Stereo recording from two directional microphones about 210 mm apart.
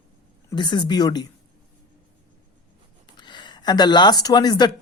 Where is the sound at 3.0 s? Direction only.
20° left (ahead or behind).